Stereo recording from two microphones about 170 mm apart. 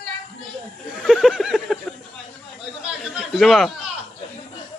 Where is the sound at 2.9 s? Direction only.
Centre (ahead or behind).